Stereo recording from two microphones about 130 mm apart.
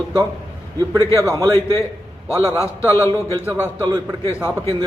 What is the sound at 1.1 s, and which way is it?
Speech, 25° right (ahead or behind).